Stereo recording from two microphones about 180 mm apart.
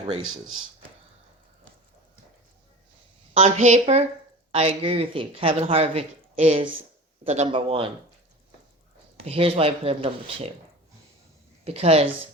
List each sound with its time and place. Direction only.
3.3 s speech: 40° right (ahead or behind)
9.2 s speech: 30° right (ahead or behind)
11.6 s speech: 35° right (ahead or behind)